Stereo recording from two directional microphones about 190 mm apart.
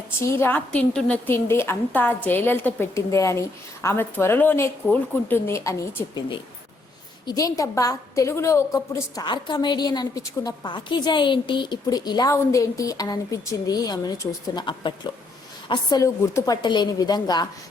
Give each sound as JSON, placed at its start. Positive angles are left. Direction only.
{"t": 0.2, "sound": "a woman's voice", "side_deg": 10}